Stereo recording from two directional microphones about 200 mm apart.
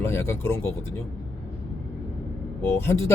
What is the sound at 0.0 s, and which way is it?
Speech, 15° left (ahead or behind).